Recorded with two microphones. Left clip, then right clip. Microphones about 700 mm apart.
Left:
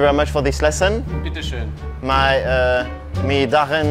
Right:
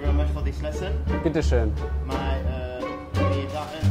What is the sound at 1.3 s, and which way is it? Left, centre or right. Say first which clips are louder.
Speech: right 5 dB; right.